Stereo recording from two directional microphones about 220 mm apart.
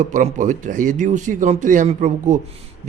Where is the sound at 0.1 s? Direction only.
35° right (ahead or behind).